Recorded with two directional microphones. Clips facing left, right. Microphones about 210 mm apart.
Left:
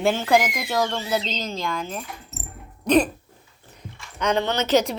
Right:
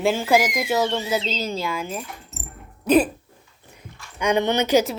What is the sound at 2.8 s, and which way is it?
Dog, 5° right (ahead or behind).